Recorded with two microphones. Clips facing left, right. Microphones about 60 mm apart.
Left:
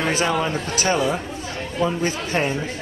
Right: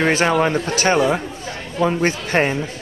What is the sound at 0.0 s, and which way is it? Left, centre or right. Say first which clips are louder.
Speech: right 5 dB; right.